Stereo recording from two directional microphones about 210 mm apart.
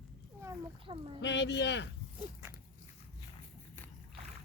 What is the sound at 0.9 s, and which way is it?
Speech, 25° right (ahead or behind).